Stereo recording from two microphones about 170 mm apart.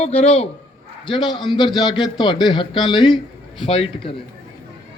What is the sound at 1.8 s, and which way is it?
A man's voice, 25° left (ahead or behind).